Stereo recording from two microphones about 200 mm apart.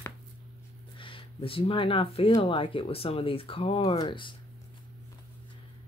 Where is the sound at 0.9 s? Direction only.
25° left (ahead or behind).